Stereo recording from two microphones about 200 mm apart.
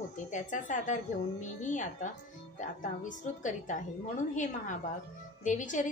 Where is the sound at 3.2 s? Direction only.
40° left (ahead or behind).